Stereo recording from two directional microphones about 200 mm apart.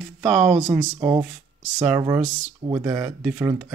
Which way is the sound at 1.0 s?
15° right (ahead or behind).